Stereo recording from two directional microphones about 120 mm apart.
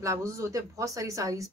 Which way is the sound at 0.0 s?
25° right (ahead or behind).